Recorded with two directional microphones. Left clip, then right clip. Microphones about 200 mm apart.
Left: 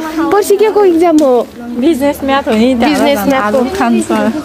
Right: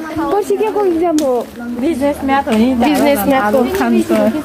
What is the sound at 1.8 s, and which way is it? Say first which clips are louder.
Speech: left 4 dB; 55° left (ahead or behind).